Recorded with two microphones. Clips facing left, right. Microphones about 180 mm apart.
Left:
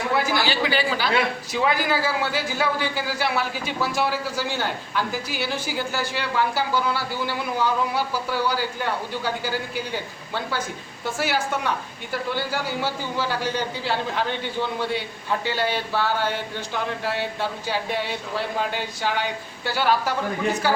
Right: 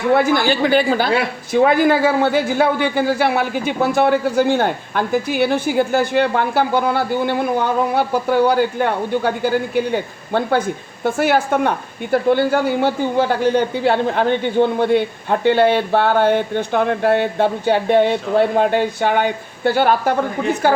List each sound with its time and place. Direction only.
0.1 s a man's voice: 55° right (ahead or behind)